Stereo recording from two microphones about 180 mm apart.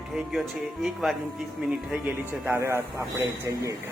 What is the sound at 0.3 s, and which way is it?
Speech, centre (ahead or behind).